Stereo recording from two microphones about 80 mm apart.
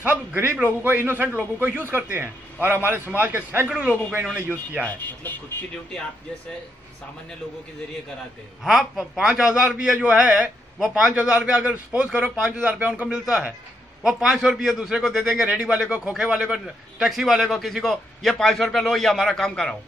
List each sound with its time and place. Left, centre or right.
0.0 s a man's voice: right
3.6 s a man's voice: centre
4.8 s speech: left
8.6 s a man's voice: centre